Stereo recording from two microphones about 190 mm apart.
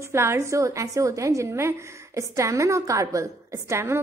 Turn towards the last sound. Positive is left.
turn(degrees=-15)  # may be behind; listen again after turning